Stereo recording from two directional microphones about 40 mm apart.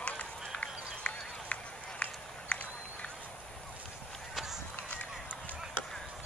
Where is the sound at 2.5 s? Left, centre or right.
Left.